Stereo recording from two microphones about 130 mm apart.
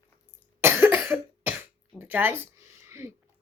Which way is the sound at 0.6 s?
20° right (ahead or behind).